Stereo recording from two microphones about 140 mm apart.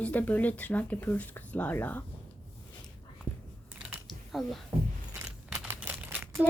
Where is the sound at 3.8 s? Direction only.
10° right (ahead or behind).